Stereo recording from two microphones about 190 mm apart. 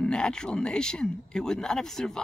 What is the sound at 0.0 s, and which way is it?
Speech, 5° left (ahead or behind).